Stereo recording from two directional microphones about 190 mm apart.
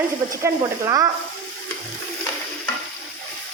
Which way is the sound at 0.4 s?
15° right (ahead or behind).